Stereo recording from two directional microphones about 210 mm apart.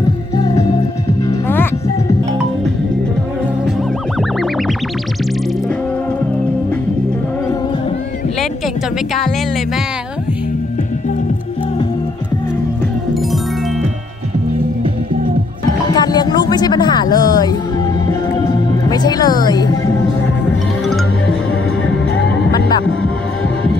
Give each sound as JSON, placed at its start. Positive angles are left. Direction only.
{"t": 1.2, "sound": "music", "side_deg": 10}
{"t": 15.9, "sound": "music", "side_deg": 20}